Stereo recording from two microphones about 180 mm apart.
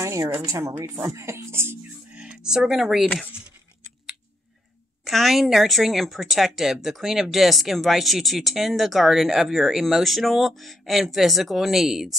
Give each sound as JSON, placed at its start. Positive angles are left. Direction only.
{"t": 0.0, "sound": "a woman's voice", "side_deg": -15}
{"t": 5.0, "sound": "speech", "side_deg": 0}